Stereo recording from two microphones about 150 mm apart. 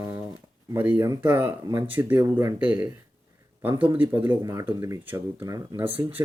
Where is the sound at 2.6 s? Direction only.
10° right (ahead or behind).